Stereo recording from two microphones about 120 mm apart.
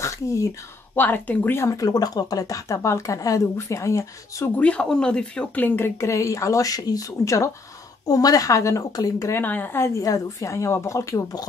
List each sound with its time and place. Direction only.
0.0 s speech: 25° left (ahead or behind)
4.6 s speech: 10° left (ahead or behind); by 9.4 s 30° left (ahead or behind)
9.4 s speech: 15° left (ahead or behind)